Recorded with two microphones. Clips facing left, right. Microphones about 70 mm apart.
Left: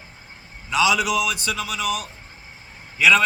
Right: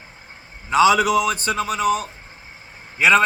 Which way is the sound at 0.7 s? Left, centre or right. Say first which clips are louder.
Right 5 dB; right.